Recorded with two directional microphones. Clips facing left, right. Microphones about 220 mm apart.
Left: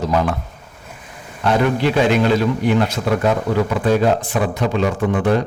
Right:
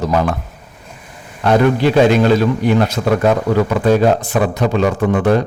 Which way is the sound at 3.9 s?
40° right (ahead or behind).